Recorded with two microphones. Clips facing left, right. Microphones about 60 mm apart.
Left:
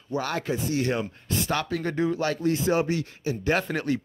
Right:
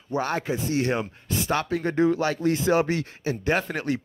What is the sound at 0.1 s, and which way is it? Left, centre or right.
Speech, right.